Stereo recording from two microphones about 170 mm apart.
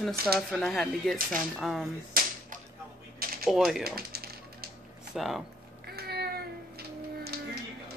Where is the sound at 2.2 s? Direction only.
60° right (ahead or behind).